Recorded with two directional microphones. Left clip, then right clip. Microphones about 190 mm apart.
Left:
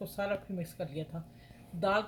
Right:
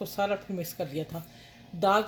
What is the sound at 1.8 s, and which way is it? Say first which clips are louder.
Speech: right 6 dB; 45° right (ahead or behind).